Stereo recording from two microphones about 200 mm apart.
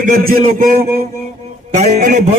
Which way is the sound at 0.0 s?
45° right (ahead or behind).